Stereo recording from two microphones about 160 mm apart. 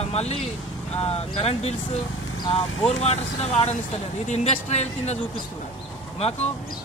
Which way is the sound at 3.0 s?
40° left (ahead or behind).